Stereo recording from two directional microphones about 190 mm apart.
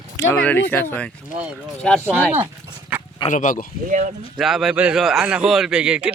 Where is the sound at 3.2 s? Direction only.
45° left (ahead or behind).